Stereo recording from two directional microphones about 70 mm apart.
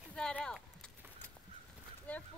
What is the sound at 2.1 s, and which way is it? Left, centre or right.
Speech, centre.